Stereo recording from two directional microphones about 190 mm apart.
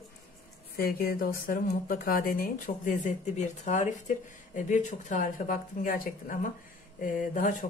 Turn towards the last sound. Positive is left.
turn(degrees=45)  # may be behind; listen again after turning